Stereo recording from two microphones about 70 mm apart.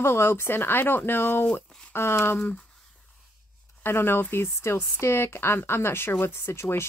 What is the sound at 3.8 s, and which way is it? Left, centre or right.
Speech, left.